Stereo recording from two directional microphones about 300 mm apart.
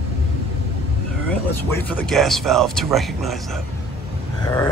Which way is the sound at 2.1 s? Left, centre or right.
Centre.